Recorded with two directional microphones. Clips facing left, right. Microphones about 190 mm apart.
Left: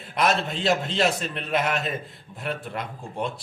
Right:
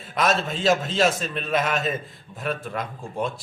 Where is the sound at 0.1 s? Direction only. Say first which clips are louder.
Right 1 dB; 20° left (ahead or behind).